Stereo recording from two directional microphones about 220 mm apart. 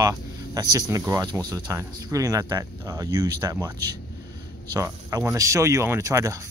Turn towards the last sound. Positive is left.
turn(degrees=-15)  # may be behind; listen again after turning